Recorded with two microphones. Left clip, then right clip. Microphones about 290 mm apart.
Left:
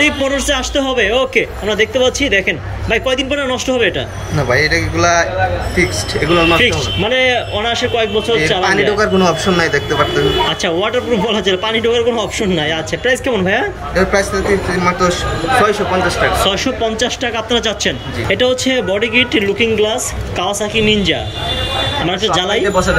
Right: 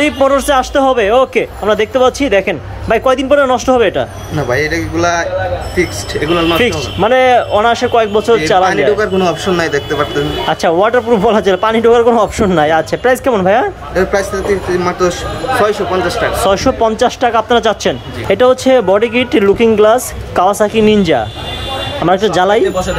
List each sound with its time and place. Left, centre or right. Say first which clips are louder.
0.0 s a man's voice: right 3 dB; centre
22.3 s a man's voice: right 4 dB; centre